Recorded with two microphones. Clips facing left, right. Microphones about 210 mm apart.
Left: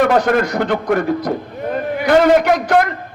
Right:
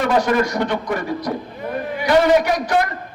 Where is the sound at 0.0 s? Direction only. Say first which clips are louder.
Left 3 dB; 55° left (ahead or behind).